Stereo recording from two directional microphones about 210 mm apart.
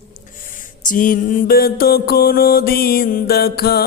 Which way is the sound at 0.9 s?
40° left (ahead or behind).